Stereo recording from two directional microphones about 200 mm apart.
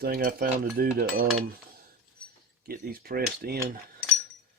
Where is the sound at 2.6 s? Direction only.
50° right (ahead or behind).